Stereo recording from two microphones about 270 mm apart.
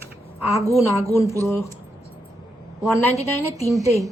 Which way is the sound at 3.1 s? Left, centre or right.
Left.